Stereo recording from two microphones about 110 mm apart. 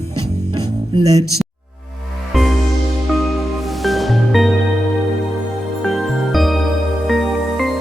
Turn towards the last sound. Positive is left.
turn(degrees=0)  # may be behind; listen again after turning